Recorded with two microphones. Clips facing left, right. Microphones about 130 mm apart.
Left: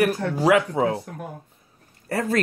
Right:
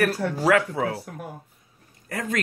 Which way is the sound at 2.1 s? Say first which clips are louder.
Left 5 dB; 35° left (ahead or behind).